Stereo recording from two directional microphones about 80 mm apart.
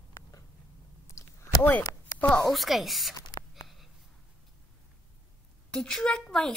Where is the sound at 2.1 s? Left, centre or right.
Centre.